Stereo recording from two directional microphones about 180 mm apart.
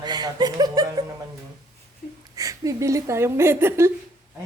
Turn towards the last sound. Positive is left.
turn(degrees=-15)  # may be behind; listen again after turning